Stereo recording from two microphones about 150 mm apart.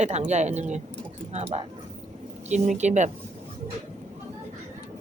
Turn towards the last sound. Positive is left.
turn(degrees=-50)  # may be behind; listen again after turning